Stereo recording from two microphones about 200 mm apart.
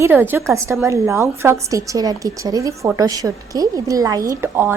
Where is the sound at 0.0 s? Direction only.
10° right (ahead or behind).